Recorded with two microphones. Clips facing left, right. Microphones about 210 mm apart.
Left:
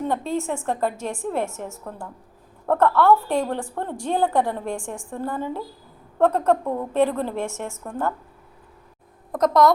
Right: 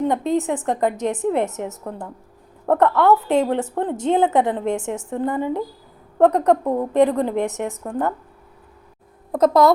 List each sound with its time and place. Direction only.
0.0 s a woman's voice: 20° right (ahead or behind)
9.3 s a woman's voice: 30° right (ahead or behind)